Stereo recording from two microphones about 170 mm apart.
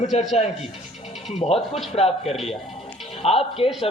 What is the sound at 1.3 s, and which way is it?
A man's voice, 40° left (ahead or behind).